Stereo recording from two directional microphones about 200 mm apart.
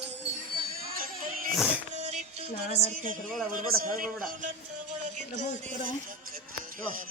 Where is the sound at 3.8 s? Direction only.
45° right (ahead or behind).